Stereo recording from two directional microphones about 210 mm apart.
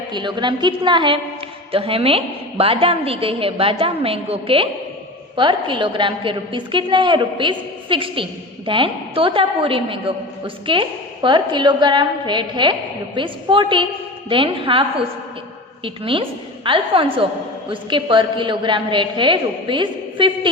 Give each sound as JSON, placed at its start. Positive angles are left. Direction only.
{"t": 0.1, "sound": "a woman's voice", "side_deg": -20}